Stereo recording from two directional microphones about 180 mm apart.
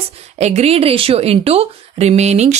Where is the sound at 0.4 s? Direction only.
35° right (ahead or behind).